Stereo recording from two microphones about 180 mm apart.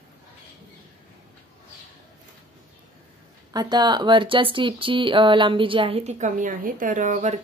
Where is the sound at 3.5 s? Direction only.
20° right (ahead or behind); by 7.4 s 40° right (ahead or behind).